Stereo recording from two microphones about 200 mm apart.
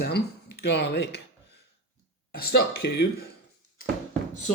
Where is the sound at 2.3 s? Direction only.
50° left (ahead or behind).